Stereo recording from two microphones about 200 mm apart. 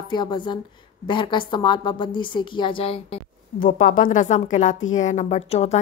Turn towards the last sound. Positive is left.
turn(degrees=35)  # may be behind; listen again after turning